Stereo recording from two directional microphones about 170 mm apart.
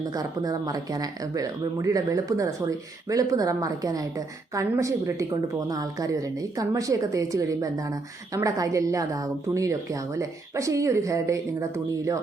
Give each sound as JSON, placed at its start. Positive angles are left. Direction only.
{"t": 0.1, "sound": "a woman's voice", "side_deg": -20}